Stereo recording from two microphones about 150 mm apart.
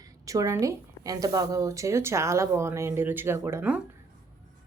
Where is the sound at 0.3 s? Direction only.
20° right (ahead or behind).